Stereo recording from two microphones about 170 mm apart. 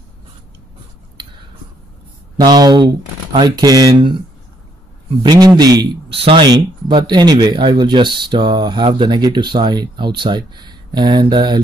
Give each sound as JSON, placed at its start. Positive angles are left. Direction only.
{"t": 2.4, "sound": "speech", "side_deg": -25}
{"t": 5.2, "sound": "speech", "side_deg": -25}